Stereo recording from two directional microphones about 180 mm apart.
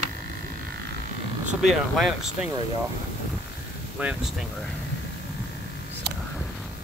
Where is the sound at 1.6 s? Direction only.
Centre (ahead or behind).